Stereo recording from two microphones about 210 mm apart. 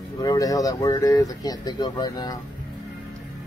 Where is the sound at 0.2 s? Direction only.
15° left (ahead or behind).